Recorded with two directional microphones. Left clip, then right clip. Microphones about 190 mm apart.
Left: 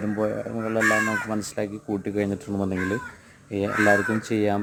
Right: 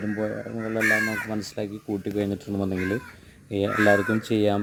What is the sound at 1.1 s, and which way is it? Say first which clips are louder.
Speech: left 3 dB; 30° right (ahead or behind).